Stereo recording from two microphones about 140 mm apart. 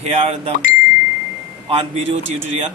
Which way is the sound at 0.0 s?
50° right (ahead or behind).